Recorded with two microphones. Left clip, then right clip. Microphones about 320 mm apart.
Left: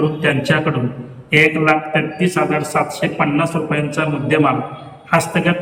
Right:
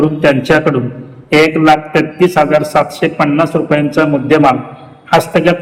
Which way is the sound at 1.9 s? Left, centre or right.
Centre.